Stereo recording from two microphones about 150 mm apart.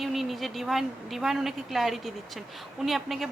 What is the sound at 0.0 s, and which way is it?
A woman's voice, centre (ahead or behind).